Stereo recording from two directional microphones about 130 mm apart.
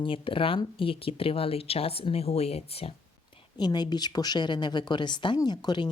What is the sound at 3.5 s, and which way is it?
Speech, 35° left (ahead or behind).